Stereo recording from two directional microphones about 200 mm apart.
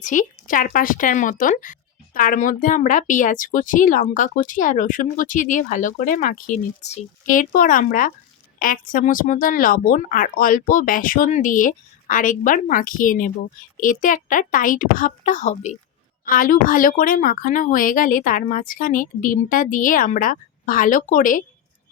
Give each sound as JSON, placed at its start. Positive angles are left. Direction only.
{"t": 0.0, "sound": "a woman's voice", "side_deg": 40}